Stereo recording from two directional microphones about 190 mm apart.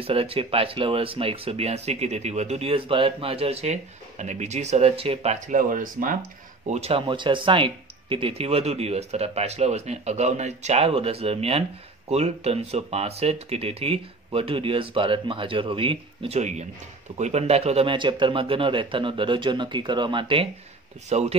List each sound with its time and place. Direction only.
0.0 s speech: 30° right (ahead or behind); by 6.1 s 45° right (ahead or behind)
6.7 s speech: 30° right (ahead or behind)